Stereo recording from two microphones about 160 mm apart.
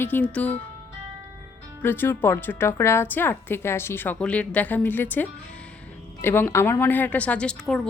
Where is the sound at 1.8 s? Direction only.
15° left (ahead or behind).